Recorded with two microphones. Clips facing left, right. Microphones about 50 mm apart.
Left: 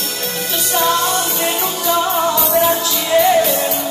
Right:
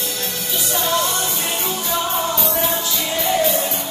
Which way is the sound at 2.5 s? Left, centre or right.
Left.